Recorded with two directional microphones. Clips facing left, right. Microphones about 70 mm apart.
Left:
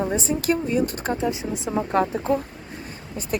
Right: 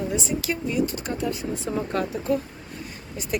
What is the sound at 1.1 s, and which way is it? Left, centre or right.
Speech, left.